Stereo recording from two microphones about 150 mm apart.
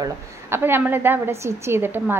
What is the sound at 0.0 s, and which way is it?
A woman's voice, 15° right (ahead or behind).